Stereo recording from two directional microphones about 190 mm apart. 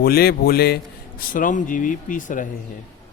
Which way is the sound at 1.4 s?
45° left (ahead or behind).